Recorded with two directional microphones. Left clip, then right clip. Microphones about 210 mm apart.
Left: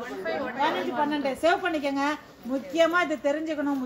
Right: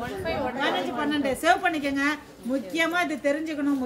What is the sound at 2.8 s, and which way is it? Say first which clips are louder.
Speech: left 3 dB; 50° right (ahead or behind).